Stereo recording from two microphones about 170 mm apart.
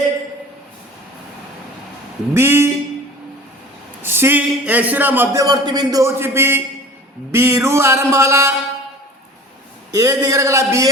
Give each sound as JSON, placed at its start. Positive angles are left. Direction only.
{"t": 2.3, "sound": "speech", "side_deg": -15}
{"t": 4.0, "sound": "a man's voice", "side_deg": -15}
{"t": 9.9, "sound": "a man's voice", "side_deg": -20}